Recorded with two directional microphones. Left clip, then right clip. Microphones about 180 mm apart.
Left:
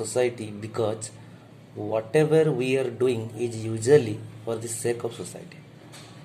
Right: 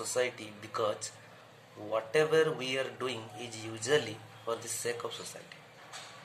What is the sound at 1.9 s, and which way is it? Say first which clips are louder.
A man's voice: left 6 dB; 15° left (ahead or behind).